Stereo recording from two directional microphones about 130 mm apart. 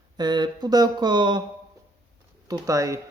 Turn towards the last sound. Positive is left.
turn(degrees=-25)  # may be behind; listen again after turning